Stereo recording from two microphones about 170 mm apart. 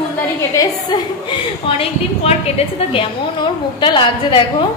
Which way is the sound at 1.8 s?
35° left (ahead or behind).